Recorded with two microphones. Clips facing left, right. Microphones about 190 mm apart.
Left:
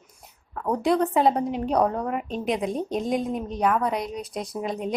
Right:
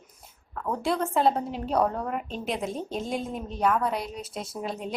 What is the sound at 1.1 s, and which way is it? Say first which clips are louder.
A woman's voice: left 3 dB; centre (ahead or behind).